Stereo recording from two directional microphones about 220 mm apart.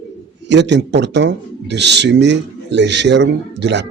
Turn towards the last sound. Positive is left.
turn(degrees=-50)  # may be behind; listen again after turning